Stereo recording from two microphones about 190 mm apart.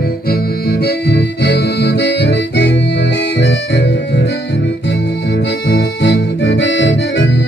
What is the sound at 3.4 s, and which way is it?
Music, 65° left (ahead or behind).